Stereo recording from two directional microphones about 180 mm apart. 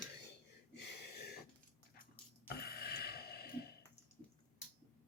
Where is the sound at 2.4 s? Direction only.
60° left (ahead or behind).